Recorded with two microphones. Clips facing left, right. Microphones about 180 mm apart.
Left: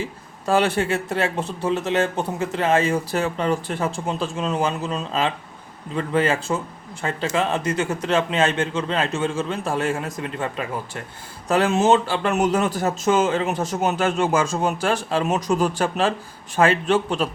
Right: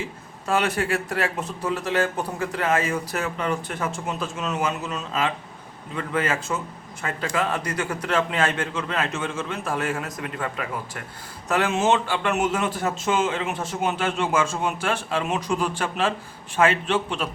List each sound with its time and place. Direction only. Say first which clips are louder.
0.4 s a man's voice: left 4 dB; 30° left (ahead or behind)